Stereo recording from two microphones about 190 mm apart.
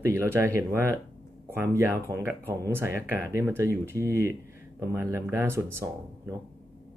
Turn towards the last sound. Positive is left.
turn(degrees=-15)  # may be behind; listen again after turning